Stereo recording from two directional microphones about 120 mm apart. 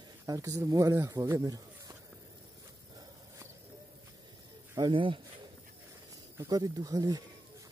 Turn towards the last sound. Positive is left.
turn(degrees=-30)  # may be behind; listen again after turning